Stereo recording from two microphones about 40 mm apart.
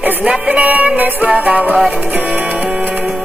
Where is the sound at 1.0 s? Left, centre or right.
Right.